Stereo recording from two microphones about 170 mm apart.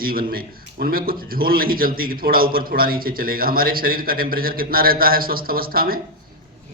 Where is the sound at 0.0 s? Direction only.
60° right (ahead or behind).